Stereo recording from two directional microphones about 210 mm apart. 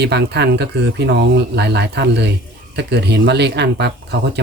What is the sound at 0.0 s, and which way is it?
Speech, 50° right (ahead or behind).